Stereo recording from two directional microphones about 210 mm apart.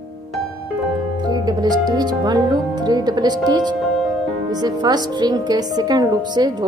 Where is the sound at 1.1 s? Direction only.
20° right (ahead or behind).